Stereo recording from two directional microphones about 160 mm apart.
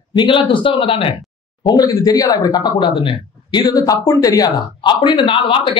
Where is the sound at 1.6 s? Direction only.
25° left (ahead or behind).